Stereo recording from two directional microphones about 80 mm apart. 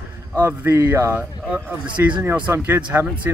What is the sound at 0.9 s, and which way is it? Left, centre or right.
Speech, right.